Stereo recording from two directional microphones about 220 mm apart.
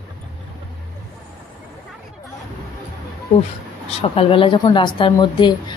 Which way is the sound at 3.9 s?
25° left (ahead or behind).